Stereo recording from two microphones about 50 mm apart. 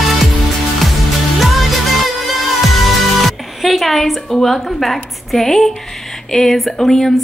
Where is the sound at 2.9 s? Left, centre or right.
Centre.